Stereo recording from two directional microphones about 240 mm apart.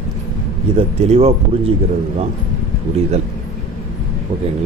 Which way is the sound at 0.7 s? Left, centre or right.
Right.